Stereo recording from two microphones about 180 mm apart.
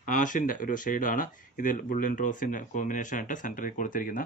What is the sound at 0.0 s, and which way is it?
Speech, 45° left (ahead or behind).